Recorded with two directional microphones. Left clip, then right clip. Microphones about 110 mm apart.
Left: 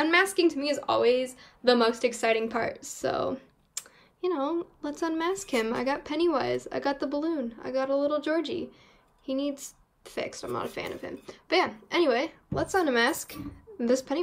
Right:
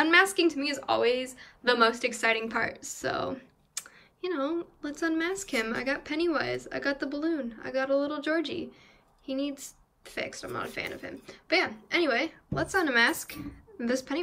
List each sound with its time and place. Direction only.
0.0 s a woman's voice: centre (ahead or behind)
0.6 s speech: 30° left (ahead or behind)
0.8 s speech: 50° left (ahead or behind)
1.9 s a woman's voice: 20° left (ahead or behind)